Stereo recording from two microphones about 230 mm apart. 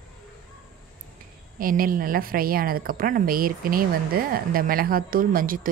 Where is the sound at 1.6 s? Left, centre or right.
Right.